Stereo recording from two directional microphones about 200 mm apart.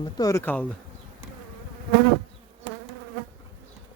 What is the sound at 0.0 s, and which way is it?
Speech, 15° left (ahead or behind).